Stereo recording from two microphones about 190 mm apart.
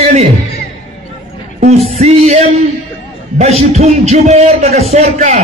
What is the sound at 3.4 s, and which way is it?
A man's voice, 35° right (ahead or behind).